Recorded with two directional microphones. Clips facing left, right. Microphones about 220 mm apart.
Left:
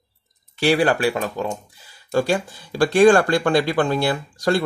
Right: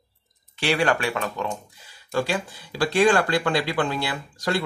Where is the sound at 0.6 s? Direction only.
35° left (ahead or behind).